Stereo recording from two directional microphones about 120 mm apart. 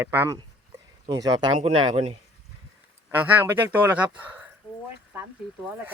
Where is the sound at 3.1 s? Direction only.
15° right (ahead or behind).